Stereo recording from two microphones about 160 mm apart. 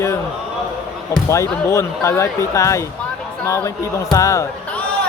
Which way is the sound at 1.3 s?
20° left (ahead or behind).